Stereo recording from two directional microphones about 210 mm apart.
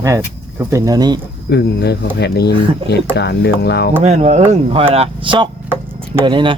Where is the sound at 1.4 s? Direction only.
50° left (ahead or behind).